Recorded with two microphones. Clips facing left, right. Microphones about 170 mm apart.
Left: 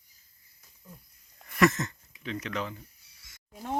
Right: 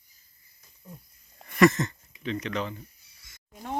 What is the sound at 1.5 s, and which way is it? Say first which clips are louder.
Speech: right 4 dB; centre (ahead or behind).